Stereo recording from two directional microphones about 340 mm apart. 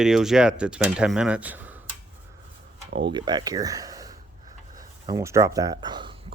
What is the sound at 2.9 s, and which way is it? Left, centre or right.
Speech, centre.